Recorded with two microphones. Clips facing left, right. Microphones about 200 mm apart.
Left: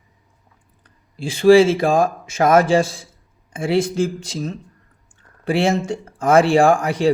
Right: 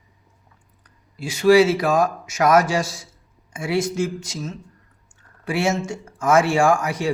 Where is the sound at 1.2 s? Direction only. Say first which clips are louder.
Left 3 dB; 30° left (ahead or behind).